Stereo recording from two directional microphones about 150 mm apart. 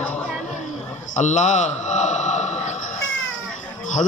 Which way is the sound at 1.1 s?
55° left (ahead or behind).